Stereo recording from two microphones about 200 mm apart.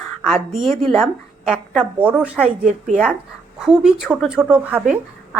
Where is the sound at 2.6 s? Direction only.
35° right (ahead or behind).